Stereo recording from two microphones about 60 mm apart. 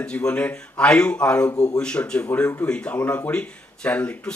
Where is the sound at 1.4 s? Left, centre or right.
Left.